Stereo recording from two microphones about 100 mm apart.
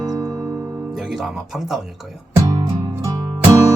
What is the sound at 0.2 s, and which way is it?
Music, 40° right (ahead or behind).